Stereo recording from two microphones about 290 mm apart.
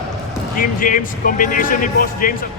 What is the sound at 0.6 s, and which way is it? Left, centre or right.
Speech, left.